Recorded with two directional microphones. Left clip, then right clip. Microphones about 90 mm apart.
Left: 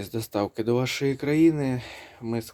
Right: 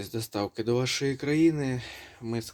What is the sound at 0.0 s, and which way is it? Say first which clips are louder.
Speech: left 4 dB; 30° left (ahead or behind).